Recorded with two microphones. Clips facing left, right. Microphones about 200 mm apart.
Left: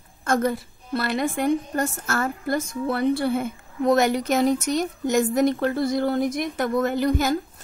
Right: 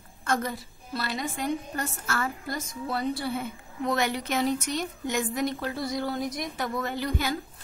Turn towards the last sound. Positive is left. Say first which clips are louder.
# left 8 dB
turn(degrees=45)  # may be behind; listen again after turning